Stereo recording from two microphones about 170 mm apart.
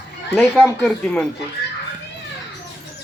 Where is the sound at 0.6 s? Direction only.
10° left (ahead or behind).